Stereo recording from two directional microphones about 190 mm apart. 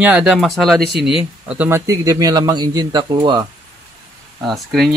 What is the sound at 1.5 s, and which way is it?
Speech, 10° right (ahead or behind).